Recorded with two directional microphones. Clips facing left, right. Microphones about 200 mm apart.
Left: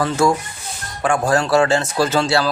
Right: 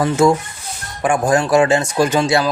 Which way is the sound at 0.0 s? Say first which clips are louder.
Right 3 dB; 20° right (ahead or behind).